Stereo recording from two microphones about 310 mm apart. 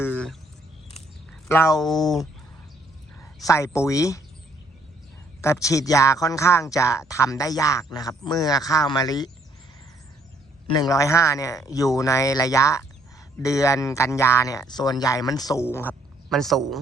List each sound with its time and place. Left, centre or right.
0.0 s a sound: centre
1.3 s speech: centre
3.4 s speech: centre
5.4 s speech: centre
10.7 s speech: centre